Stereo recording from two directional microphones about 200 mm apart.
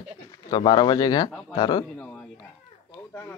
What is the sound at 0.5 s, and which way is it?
Speech, 20° left (ahead or behind).